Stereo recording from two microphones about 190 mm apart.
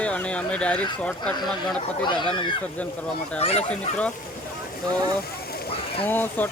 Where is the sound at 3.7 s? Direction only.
5° left (ahead or behind).